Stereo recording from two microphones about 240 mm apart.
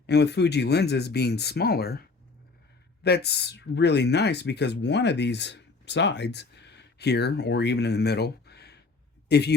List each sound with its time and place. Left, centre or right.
0.1 s speech: left
3.0 s speech: left